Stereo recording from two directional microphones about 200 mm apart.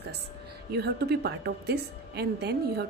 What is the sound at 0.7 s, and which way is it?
Speech, 55° right (ahead or behind).